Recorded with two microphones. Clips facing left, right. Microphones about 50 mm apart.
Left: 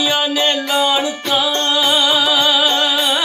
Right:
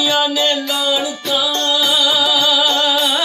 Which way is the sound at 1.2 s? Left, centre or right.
Left.